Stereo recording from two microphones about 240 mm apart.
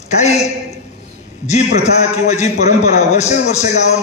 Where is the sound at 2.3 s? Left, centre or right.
Left.